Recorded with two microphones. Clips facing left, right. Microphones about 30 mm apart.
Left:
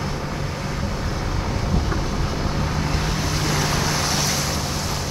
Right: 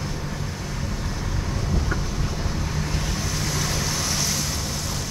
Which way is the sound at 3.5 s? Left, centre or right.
Left.